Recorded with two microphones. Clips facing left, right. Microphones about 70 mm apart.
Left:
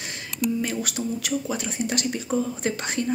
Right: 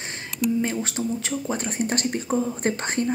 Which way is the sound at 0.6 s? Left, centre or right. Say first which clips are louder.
Right 2 dB; right.